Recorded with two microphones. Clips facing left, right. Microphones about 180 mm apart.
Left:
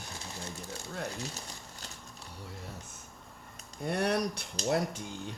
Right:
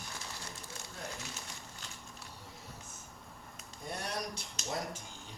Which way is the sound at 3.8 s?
65° left (ahead or behind).